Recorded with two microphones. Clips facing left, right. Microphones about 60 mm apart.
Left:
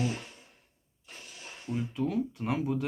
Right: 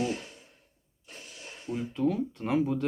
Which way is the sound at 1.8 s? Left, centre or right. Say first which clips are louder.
Right 2 dB; centre.